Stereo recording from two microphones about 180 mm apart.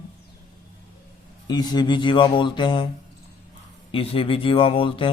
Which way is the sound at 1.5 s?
20° left (ahead or behind).